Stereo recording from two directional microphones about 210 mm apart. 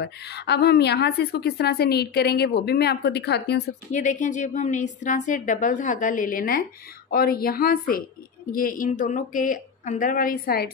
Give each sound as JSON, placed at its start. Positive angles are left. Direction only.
{"t": 0.0, "sound": "a woman's voice", "side_deg": 50}
{"t": 3.9, "sound": "a woman's voice", "side_deg": 35}